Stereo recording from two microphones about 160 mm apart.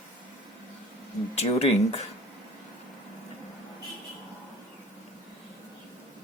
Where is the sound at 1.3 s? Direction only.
40° left (ahead or behind).